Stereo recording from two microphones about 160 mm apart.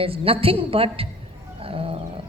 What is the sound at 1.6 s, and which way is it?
Roaring cats, 35° right (ahead or behind).